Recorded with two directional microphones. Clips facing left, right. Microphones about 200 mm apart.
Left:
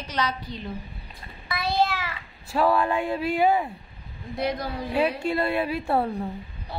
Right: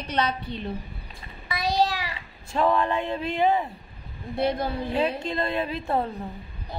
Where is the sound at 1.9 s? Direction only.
15° right (ahead or behind).